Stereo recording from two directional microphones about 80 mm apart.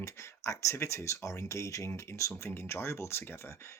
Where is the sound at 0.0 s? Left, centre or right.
Left.